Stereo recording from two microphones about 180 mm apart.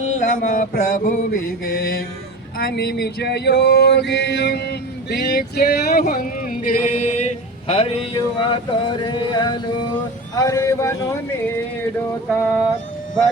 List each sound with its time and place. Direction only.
0.1 s mantra: 45° left (ahead or behind); by 9.6 s 25° left (ahead or behind)
10.3 s speech: 20° left (ahead or behind)